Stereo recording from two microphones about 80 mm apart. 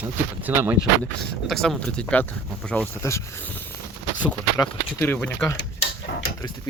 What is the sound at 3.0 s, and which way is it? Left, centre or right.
Speech, left.